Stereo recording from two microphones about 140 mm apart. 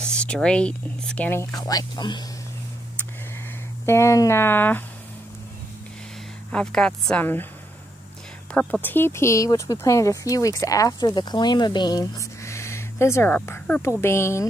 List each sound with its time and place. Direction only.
0.0 s speech: 5° left (ahead or behind)
1.5 s speech: 25° left (ahead or behind)
3.8 s speech: 20° left (ahead or behind)
6.5 s speech: 5° left (ahead or behind)
8.5 s speech: 10° left (ahead or behind)